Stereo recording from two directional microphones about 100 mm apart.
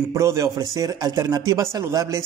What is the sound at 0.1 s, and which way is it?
Speech, 30° right (ahead or behind).